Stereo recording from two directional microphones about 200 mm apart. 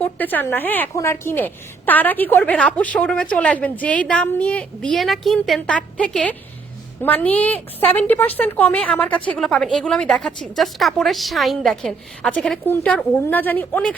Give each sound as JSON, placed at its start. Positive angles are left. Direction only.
{"t": 0.0, "sound": "a woman's voice", "side_deg": 10}